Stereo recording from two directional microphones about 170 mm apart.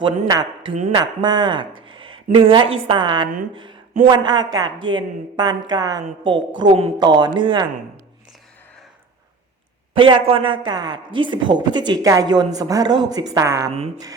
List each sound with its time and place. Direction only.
0.3 s speech: 20° right (ahead or behind)
9.9 s speech: 30° right (ahead or behind)